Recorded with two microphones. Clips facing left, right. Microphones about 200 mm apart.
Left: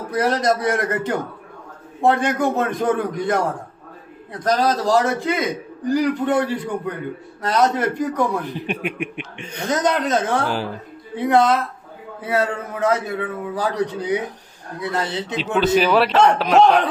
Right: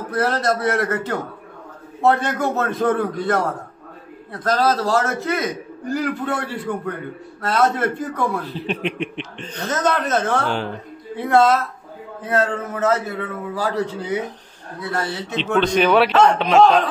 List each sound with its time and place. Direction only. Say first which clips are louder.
0.1 s a man's voice: left 1 dB; 15° left (ahead or behind)
10.5 s a man's voice: even; 5° left (ahead or behind)
11.2 s a man's voice: right 1 dB; 15° left (ahead or behind)
15.6 s a man's voice: even; 5° left (ahead or behind)